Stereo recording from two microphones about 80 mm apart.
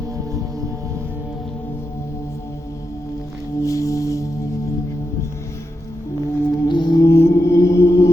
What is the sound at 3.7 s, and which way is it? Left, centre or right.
Music, left.